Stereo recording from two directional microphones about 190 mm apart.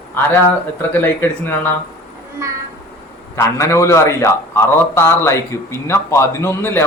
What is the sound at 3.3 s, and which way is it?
A man's voice, 15° left (ahead or behind).